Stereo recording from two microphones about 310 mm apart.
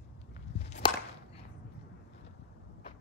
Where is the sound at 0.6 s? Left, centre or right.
Left.